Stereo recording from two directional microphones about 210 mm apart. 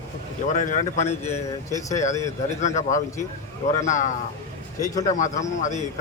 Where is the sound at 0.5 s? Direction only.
35° left (ahead or behind).